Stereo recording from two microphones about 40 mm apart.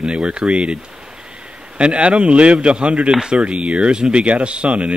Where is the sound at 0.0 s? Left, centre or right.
Right.